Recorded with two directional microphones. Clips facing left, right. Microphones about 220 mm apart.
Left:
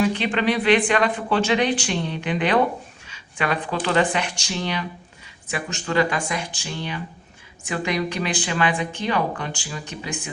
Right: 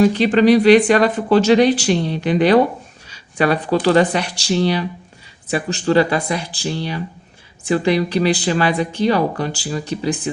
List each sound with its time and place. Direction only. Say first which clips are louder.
0.0 s speech: right 8 dB; 40° right (ahead or behind)